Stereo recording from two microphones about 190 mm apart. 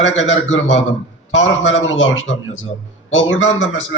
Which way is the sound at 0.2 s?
90° left.